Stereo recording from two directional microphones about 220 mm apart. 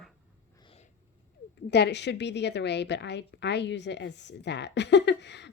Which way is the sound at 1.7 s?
50° left (ahead or behind).